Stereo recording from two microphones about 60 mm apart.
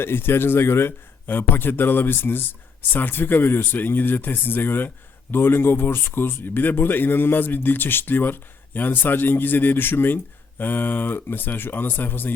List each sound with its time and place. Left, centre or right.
0.0 s a man's voice: left